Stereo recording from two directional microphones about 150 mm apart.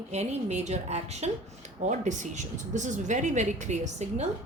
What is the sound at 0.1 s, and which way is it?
A woman's voice, 45° right (ahead or behind).